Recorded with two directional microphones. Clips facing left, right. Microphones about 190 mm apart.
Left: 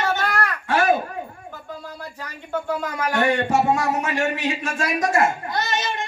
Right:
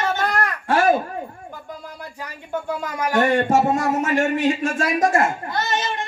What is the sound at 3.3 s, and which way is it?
A man's voice, 50° right (ahead or behind).